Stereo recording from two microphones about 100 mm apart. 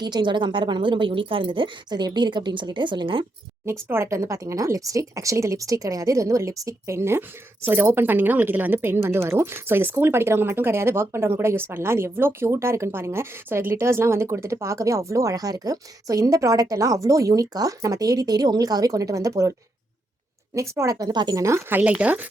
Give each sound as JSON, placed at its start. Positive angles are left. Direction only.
{"t": 0.0, "sound": "a woman's voice", "side_deg": -50}
{"t": 3.8, "sound": "a woman's voice", "side_deg": -25}
{"t": 20.6, "sound": "speech", "side_deg": -30}
{"t": 21.4, "sound": "a woman's voice", "side_deg": -30}
{"t": 21.8, "sound": "speech", "side_deg": -10}